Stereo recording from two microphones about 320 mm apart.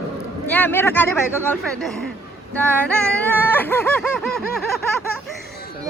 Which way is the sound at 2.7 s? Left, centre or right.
Centre.